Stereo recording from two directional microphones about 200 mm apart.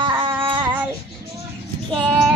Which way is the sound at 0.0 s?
25° right (ahead or behind).